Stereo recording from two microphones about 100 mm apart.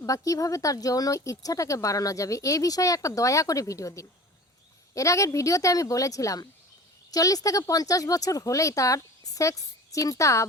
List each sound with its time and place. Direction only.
0.0 s speech: 35° left (ahead or behind)